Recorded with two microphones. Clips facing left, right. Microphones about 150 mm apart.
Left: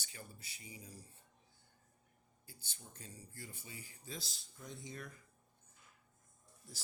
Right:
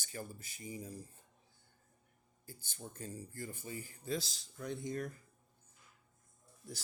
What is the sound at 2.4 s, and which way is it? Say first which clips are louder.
Speech: right 9 dB; 45° right (ahead or behind).